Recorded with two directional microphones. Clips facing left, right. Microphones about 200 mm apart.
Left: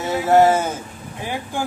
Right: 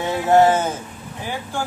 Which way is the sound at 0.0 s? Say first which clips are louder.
Even; 10° left (ahead or behind).